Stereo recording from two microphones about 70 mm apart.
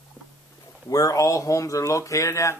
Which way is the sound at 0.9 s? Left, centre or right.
Left.